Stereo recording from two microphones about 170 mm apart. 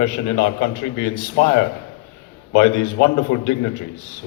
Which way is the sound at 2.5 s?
65° left (ahead or behind).